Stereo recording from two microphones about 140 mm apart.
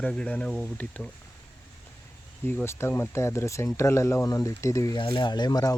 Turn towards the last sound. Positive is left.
turn(degrees=25)  # may be behind; listen again after turning